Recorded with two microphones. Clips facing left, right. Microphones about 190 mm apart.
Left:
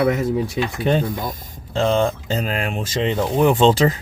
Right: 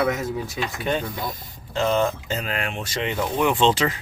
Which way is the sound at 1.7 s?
30° left (ahead or behind).